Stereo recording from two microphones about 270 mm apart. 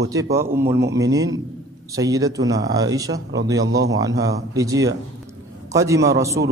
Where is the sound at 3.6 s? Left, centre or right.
Right.